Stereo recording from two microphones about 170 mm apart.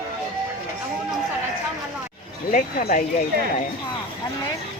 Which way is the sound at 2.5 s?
55° left (ahead or behind).